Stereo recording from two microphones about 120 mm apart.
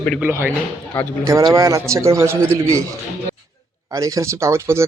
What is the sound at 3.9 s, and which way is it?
Speech, 25° right (ahead or behind).